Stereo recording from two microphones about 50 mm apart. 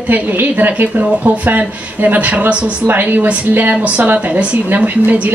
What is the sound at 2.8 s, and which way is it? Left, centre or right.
Speech, right.